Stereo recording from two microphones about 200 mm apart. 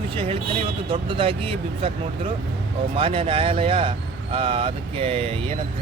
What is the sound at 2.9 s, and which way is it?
Speech, 25° right (ahead or behind).